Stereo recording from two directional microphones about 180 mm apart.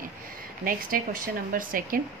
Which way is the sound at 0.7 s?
50° right (ahead or behind).